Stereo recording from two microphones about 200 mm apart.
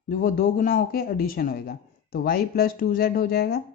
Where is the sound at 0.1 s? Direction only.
45° left (ahead or behind).